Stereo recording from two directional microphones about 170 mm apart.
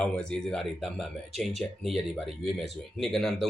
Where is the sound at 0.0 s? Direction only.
5° left (ahead or behind).